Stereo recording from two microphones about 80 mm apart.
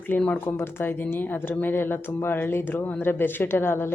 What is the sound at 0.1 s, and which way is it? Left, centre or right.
Speech, left.